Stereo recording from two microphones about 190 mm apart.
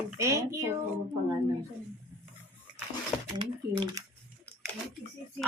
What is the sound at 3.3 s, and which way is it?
Speech, 25° right (ahead or behind).